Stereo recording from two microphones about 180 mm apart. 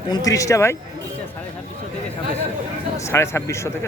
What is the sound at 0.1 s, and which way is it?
Speech, 20° left (ahead or behind).